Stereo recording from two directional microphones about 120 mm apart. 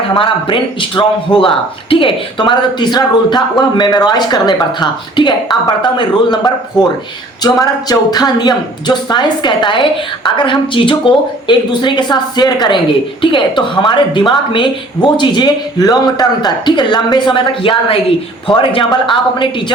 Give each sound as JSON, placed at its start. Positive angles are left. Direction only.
{"t": 0.1, "sound": "a man's voice", "side_deg": 45}